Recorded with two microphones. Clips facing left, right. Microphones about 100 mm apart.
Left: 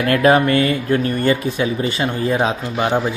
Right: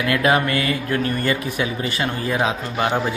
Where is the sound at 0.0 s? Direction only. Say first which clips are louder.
Left 5 dB; 40° left (ahead or behind).